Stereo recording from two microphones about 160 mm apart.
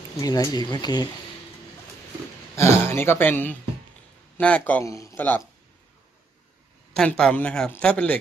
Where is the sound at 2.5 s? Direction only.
15° left (ahead or behind).